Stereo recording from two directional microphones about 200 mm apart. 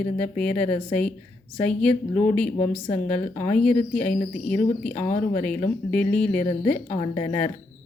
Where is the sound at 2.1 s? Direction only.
40° left (ahead or behind).